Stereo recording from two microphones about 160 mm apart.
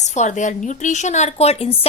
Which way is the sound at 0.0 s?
45° left (ahead or behind).